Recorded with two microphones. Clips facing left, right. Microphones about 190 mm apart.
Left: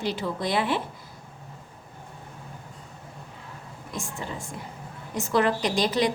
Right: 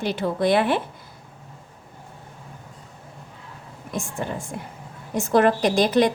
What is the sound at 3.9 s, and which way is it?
A woman's voice, 50° right (ahead or behind).